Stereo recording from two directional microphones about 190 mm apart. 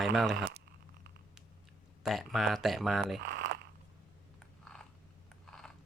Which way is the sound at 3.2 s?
50° right (ahead or behind).